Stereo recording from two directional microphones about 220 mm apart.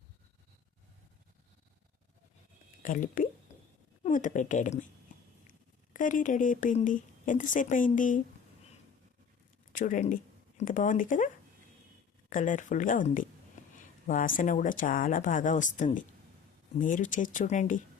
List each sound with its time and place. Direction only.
2.8 s speech: 35° left (ahead or behind)
9.7 s speech: 35° left (ahead or behind)
12.3 s speech: 35° left (ahead or behind)